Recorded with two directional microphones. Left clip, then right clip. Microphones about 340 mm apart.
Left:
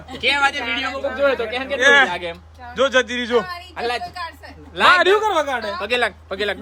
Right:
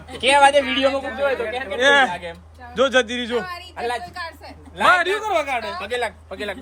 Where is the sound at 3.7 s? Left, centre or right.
Left.